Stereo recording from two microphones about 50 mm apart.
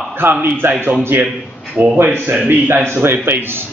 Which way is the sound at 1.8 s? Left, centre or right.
Right.